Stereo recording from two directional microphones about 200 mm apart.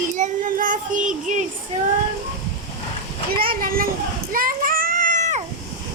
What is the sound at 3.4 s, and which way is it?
Speech, 45° right (ahead or behind).